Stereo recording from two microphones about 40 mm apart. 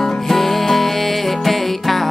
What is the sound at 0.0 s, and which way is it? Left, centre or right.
Music, centre.